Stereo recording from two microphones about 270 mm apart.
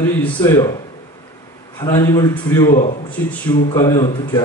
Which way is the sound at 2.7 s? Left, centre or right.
Left.